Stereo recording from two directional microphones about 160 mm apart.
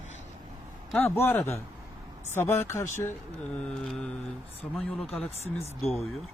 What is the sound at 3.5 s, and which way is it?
Mantra, 5° left (ahead or behind).